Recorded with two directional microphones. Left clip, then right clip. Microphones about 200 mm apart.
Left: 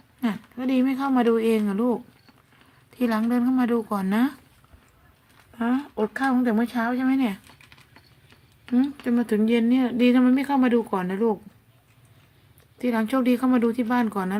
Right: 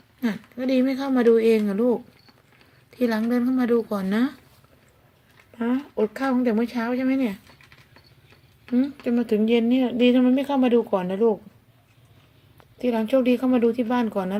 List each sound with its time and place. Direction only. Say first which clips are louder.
0.2 s speech: right 1 dB; 5° left (ahead or behind)
5.5 s speech: right 1 dB; 15° left (ahead or behind)
8.8 s speech: even; 20° left (ahead or behind)
12.8 s speech: right 3 dB; 20° left (ahead or behind)